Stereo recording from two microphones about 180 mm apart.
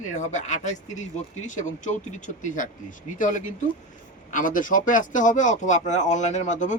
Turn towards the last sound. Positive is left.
turn(degrees=40)  # may be behind; listen again after turning